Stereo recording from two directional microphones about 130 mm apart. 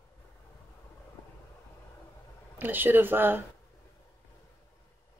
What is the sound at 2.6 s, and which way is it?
Speech, 15° right (ahead or behind).